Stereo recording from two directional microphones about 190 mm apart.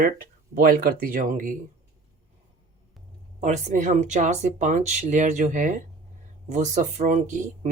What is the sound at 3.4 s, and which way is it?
Speech, 40° right (ahead or behind).